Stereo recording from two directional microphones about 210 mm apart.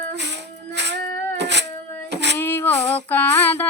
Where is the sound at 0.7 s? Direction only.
55° right (ahead or behind).